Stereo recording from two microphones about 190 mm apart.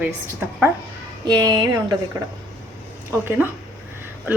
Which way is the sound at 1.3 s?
20° right (ahead or behind).